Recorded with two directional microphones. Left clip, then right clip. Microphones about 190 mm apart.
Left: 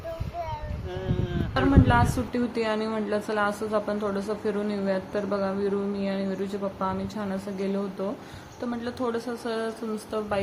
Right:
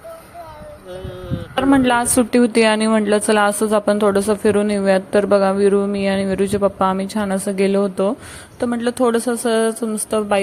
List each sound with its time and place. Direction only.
1.7 s a woman's voice: 50° right (ahead or behind)